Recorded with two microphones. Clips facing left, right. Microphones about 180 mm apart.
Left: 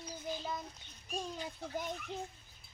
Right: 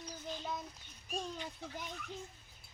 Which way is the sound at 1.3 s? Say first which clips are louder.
Left 4 dB; 45° left (ahead or behind).